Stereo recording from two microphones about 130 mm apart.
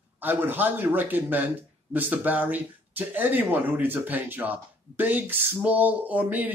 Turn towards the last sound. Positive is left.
turn(degrees=-10)  # may be behind; listen again after turning